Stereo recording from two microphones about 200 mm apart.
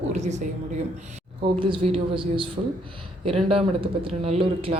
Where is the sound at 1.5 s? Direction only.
25° right (ahead or behind).